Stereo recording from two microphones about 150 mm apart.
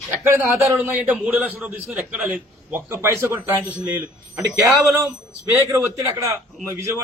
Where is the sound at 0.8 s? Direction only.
10° right (ahead or behind).